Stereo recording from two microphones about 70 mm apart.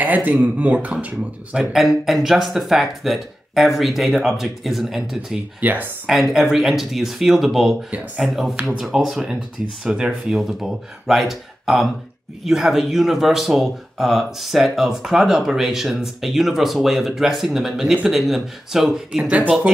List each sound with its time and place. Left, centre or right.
0.0 s speech: right
1.6 s speech: centre
5.6 s speech: right
6.0 s speech: centre